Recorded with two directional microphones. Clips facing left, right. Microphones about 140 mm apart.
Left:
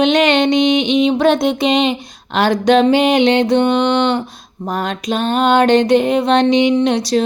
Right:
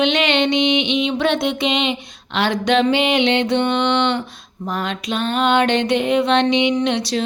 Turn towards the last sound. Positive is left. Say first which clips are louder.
# left 5 dB
turn(degrees=40)  # may be behind; listen again after turning